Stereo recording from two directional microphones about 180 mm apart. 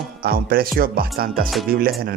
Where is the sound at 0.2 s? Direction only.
55° right (ahead or behind).